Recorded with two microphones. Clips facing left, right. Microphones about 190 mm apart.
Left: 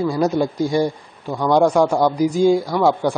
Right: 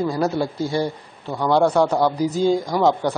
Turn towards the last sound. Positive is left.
turn(degrees=10)  # may be behind; listen again after turning